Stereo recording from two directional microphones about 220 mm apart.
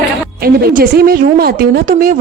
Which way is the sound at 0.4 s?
40° right (ahead or behind).